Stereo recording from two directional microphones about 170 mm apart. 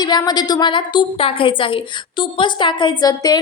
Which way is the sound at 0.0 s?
25° left (ahead or behind).